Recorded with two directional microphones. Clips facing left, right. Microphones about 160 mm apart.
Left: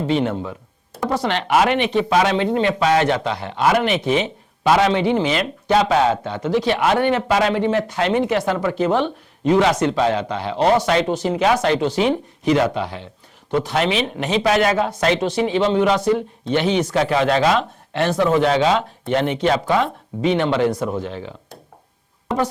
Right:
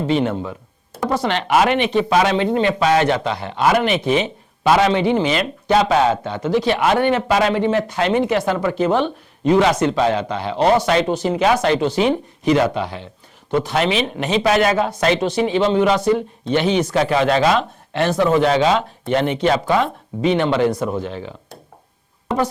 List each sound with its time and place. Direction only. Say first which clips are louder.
0.0 s speech: right 1 dB; 10° right (ahead or behind)